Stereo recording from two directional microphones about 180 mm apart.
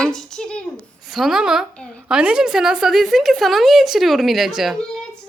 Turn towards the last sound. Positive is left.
turn(degrees=0)  # may be behind; listen again after turning